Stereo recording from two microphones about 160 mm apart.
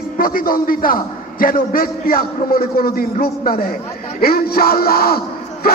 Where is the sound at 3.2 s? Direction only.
70° left (ahead or behind).